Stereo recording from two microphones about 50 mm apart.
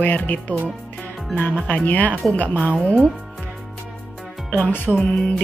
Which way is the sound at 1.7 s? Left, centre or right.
Left.